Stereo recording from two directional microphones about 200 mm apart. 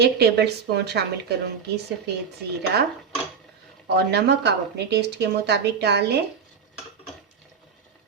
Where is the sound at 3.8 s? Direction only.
55° right (ahead or behind).